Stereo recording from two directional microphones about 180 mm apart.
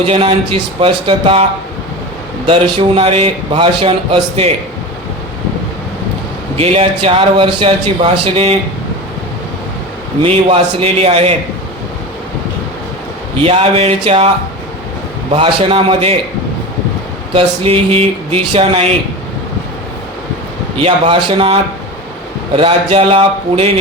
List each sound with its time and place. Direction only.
0.0 s a man's voice: 30° right (ahead or behind)
2.5 s a man's voice: 30° right (ahead or behind)
6.6 s a man's voice: 30° right (ahead or behind)
10.2 s a man's voice: 30° right (ahead or behind)
13.4 s a man's voice: 35° right (ahead or behind)
15.4 s a man's voice: 30° right (ahead or behind)
17.3 s a man's voice: 30° right (ahead or behind)
20.7 s a man's voice: 30° right (ahead or behind)